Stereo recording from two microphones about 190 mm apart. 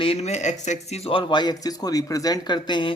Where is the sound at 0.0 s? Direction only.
30° left (ahead or behind).